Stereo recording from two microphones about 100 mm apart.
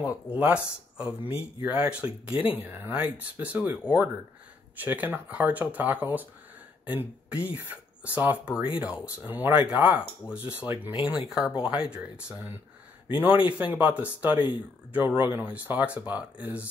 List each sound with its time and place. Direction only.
0.0 s speech: 15° right (ahead or behind)